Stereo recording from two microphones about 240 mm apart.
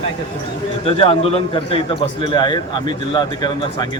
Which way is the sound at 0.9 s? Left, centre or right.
Left.